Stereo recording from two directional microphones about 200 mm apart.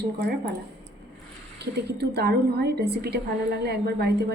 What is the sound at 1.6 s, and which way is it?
A woman's voice, 55° right (ahead or behind).